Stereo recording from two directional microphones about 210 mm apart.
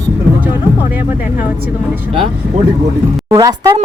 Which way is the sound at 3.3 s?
15° right (ahead or behind).